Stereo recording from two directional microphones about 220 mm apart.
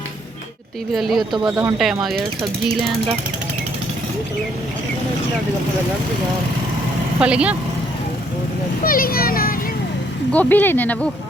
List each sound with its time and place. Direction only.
0.9 s speech: centre (ahead or behind)
7.2 s speech: 5° right (ahead or behind)
8.8 s a child's voice: 40° left (ahead or behind)
10.3 s speech: 10° left (ahead or behind)